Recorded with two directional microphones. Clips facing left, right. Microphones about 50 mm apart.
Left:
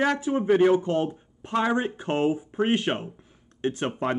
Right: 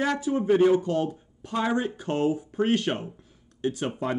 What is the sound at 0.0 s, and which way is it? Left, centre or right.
A man's voice, left.